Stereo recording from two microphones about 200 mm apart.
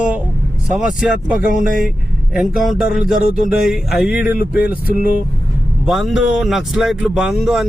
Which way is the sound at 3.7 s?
Centre (ahead or behind).